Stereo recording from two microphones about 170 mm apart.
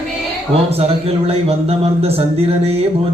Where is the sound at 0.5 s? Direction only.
35° right (ahead or behind).